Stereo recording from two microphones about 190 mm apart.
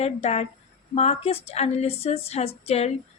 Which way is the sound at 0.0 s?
35° left (ahead or behind).